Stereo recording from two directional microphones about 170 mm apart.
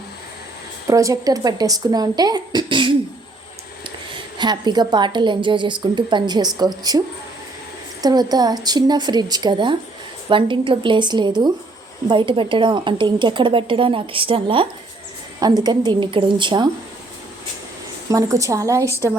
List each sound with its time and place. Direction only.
0.9 s a woman's voice: 20° right (ahead or behind)
8.0 s a woman's voice: 25° right (ahead or behind)
18.1 s a woman's voice: 20° right (ahead or behind)